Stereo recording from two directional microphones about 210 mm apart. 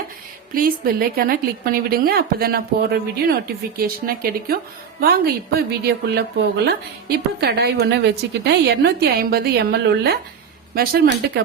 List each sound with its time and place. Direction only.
0.5 s a woman's voice: 45° right (ahead or behind)